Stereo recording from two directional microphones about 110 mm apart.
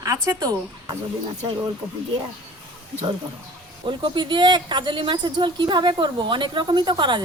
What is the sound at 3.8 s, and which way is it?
Speech, 45° right (ahead or behind).